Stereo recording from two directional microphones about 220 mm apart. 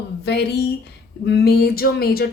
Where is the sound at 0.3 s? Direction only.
50° left (ahead or behind).